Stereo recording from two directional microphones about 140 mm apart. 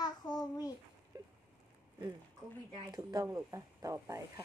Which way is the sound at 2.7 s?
30° right (ahead or behind).